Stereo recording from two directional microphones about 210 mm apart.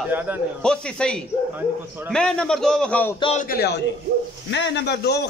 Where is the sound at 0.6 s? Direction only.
5° left (ahead or behind).